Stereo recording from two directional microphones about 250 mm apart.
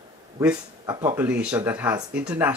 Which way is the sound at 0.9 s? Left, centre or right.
Centre.